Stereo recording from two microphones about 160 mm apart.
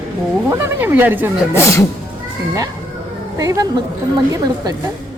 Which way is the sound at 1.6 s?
15° left (ahead or behind).